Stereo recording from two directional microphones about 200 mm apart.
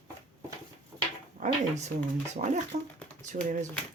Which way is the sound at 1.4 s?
35° right (ahead or behind).